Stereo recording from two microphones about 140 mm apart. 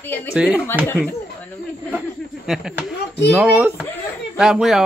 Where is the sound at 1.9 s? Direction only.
5° right (ahead or behind).